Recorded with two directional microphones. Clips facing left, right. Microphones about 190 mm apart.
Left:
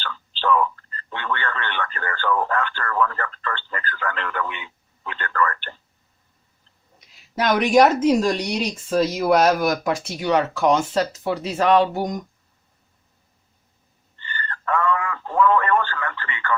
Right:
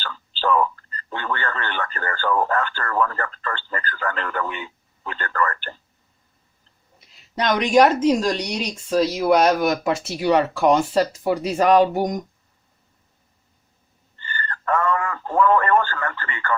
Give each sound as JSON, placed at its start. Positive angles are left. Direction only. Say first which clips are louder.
{"t": 0.0, "sound": "radio", "louder": "right 1 dB", "side_deg": -40}
{"t": 7.0, "sound": "speech", "louder": "left 1 dB", "side_deg": 0}
{"t": 14.2, "sound": "radio", "louder": "right 1 dB", "side_deg": -45}